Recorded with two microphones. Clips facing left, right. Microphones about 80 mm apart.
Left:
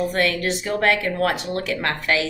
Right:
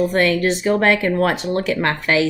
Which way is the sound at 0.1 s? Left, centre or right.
Right.